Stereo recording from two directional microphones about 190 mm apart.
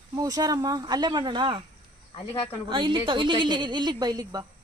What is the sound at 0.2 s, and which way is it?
A woman's voice, 20° right (ahead or behind).